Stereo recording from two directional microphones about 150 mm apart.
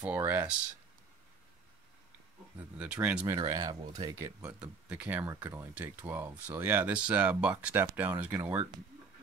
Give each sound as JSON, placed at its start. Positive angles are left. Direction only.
{"t": 0.0, "sound": "speech", "side_deg": -10}
{"t": 2.8, "sound": "speech", "side_deg": -10}
{"t": 3.3, "sound": "speech", "side_deg": -25}